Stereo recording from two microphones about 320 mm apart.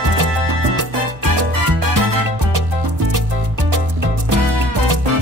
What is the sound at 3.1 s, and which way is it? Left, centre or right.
Music, right.